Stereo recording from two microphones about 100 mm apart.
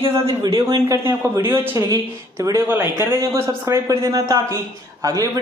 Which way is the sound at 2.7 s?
25° right (ahead or behind).